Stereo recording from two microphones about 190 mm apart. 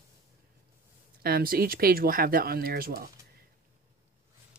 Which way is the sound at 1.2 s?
50° right (ahead or behind).